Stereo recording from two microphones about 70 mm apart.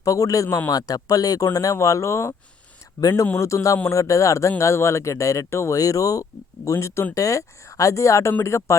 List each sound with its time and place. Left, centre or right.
0.0 s speech: left
3.3 s speech: left
5.7 s speech: left
6.7 s speech: left